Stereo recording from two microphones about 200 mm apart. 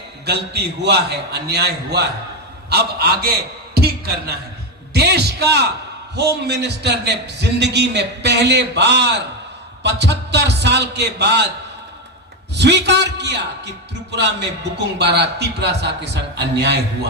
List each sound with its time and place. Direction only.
0.3 s a man's voice: 55° right (ahead or behind)
12.5 s a man's voice: 60° right (ahead or behind)